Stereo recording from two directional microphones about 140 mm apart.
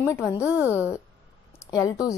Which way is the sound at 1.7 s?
25° left (ahead or behind).